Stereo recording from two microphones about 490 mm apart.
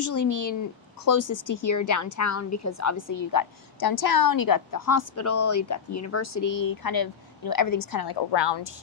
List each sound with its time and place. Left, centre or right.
0.0 s a woman's voice: left